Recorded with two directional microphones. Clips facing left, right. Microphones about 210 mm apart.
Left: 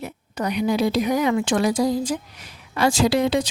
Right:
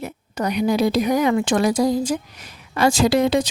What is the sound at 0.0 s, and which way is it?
Speech, 40° right (ahead or behind).